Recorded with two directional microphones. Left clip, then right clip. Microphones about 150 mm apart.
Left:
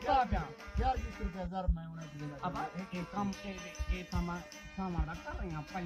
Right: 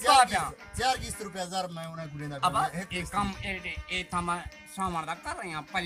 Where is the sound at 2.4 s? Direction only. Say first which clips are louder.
Right 13 dB; 40° right (ahead or behind).